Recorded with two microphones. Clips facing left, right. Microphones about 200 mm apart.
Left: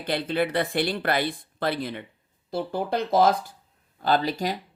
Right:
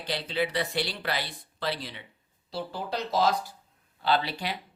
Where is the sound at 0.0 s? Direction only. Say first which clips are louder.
Left 5 dB; 55° left (ahead or behind).